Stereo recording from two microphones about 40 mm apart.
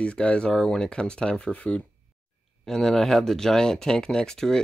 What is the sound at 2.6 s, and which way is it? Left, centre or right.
Speech, centre.